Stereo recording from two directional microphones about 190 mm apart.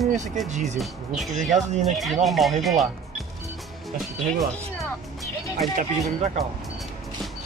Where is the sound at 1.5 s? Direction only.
40° right (ahead or behind).